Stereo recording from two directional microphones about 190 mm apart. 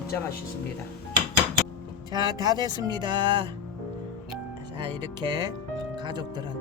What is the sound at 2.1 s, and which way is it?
Music, 20° right (ahead or behind).